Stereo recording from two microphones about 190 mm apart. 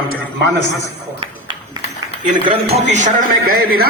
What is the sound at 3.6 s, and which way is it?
Speech, 50° right (ahead or behind).